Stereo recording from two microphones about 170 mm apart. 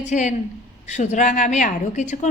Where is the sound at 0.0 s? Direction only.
45° left (ahead or behind).